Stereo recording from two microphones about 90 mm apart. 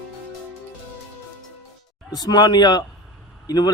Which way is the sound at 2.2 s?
50° left (ahead or behind).